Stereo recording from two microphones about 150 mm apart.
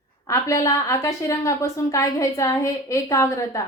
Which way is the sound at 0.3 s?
20° left (ahead or behind).